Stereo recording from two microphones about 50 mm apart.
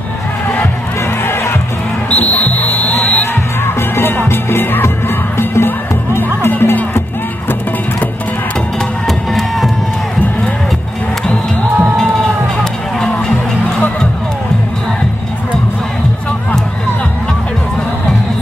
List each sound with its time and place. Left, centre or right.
2.0 s music: left
3.6 s music: left
6.5 s music: left
9.0 s music: centre
13.0 s music: centre